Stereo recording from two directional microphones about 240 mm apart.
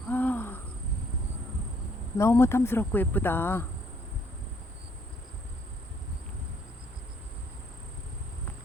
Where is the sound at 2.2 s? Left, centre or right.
Centre.